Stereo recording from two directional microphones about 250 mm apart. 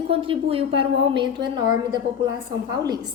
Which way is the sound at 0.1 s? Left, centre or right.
Right.